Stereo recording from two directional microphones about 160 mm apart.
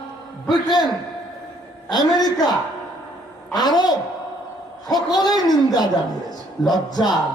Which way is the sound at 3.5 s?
25° left (ahead or behind).